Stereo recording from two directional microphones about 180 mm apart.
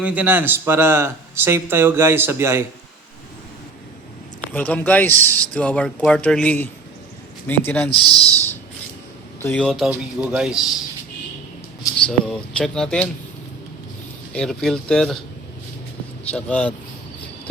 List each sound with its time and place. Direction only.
0.0 s speech: 10° right (ahead or behind)
4.4 s speech: 10° left (ahead or behind)
7.9 s speech: 30° left (ahead or behind)
9.4 s a man's voice: 5° left (ahead or behind)
12.0 s a man's voice: 5° left (ahead or behind)
14.3 s a man's voice: centre (ahead or behind)
16.3 s speech: 5° left (ahead or behind)